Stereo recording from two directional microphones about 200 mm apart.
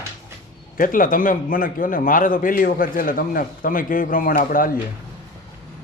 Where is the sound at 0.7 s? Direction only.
45° left (ahead or behind).